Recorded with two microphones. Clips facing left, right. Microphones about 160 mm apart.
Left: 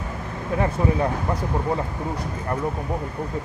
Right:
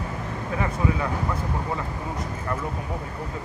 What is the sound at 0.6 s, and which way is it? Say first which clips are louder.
Speech: left 4 dB; 40° left (ahead or behind).